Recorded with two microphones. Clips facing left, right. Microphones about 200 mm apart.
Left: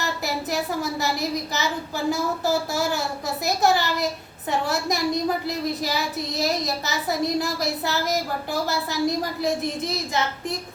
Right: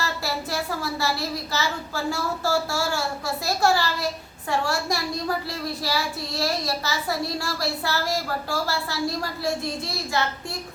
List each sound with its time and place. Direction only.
0.0 s a child's voice: 20° left (ahead or behind)